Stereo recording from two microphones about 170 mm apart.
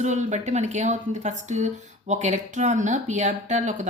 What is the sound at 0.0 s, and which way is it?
Speech, 45° right (ahead or behind).